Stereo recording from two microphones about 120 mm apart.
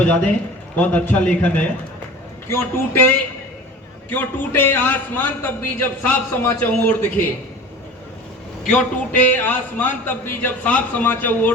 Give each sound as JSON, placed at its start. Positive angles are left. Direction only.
{"t": 0.8, "sound": "a man's voice", "side_deg": 10}
{"t": 8.7, "sound": "a man's voice", "side_deg": 15}